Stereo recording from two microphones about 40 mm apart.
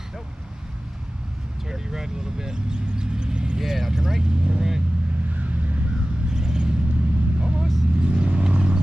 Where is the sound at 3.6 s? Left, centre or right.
Centre.